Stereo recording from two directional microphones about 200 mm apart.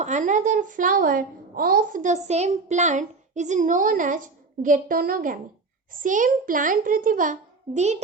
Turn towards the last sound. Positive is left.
turn(degrees=-35)  # may be behind; listen again after turning